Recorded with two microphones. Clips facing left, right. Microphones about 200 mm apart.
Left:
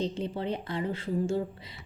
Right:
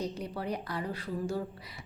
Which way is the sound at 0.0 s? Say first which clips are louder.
Left 4 dB; 25° left (ahead or behind).